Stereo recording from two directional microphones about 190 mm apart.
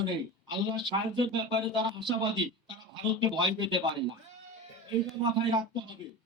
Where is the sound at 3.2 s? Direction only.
25° right (ahead or behind).